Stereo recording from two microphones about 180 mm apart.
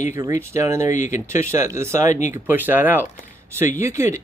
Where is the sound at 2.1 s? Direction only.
40° left (ahead or behind).